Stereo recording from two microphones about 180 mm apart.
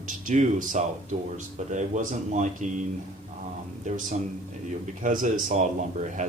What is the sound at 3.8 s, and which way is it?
Speech, 45° right (ahead or behind).